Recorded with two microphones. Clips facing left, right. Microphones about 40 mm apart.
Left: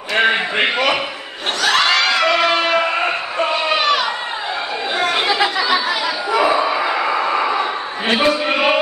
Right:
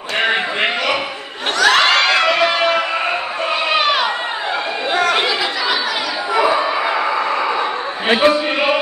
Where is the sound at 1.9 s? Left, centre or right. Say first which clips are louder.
Right 2 dB; right.